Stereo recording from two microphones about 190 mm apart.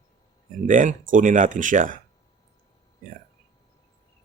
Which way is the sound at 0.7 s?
45° right (ahead or behind).